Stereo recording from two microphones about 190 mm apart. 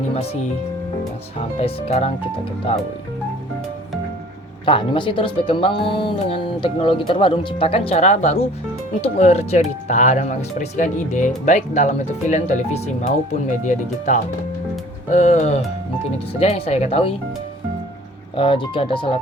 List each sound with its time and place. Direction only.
1.4 s speech: 35° left (ahead or behind)
4.6 s speech: 25° left (ahead or behind)
18.3 s speech: 25° left (ahead or behind)